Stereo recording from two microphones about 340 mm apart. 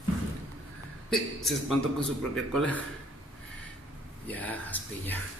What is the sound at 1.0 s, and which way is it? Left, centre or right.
Speech, centre.